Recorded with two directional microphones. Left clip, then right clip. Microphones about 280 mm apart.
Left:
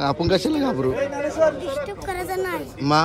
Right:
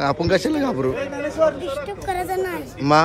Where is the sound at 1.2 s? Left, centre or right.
Left.